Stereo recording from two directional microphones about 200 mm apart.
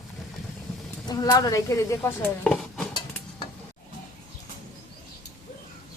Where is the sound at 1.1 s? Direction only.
20° left (ahead or behind).